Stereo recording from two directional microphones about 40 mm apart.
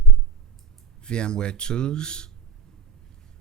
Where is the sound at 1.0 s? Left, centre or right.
Left.